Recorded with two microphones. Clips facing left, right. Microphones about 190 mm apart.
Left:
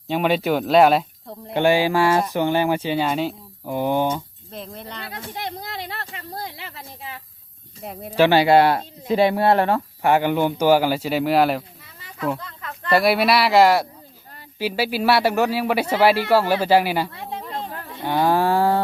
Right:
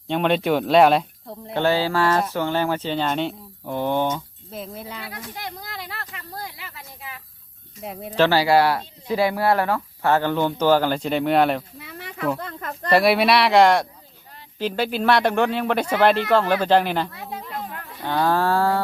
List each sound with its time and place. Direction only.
0.1 s speech: 5° left (ahead or behind)
1.5 s speech: 15° left (ahead or behind)
4.5 s speech: 5° right (ahead or behind)
5.1 s a sound: 25° left (ahead or behind)
7.8 s speech: centre (ahead or behind)
8.2 s speech: 20° left (ahead or behind)
10.0 s speech: 15° left (ahead or behind)
11.8 s a sound: 70° right (ahead or behind)
12.4 s speech: 50° right (ahead or behind)
12.9 s speech: centre (ahead or behind)
17.1 s speech: 30° left (ahead or behind)
17.5 s wild animals: 30° left (ahead or behind)
18.0 s speech: 20° left (ahead or behind)